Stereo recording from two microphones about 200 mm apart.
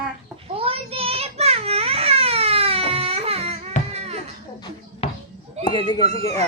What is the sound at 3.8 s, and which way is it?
Music, 35° left (ahead or behind).